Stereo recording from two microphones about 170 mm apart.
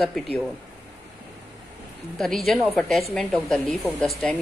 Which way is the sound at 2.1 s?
Centre (ahead or behind).